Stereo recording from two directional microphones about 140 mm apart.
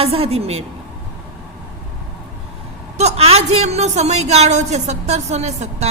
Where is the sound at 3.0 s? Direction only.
50° right (ahead or behind).